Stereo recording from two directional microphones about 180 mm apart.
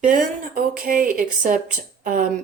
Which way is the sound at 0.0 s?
50° right (ahead or behind).